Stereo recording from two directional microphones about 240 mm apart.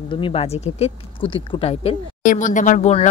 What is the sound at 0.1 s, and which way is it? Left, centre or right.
Speech, left.